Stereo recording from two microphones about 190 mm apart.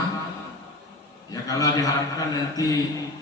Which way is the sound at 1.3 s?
20° left (ahead or behind).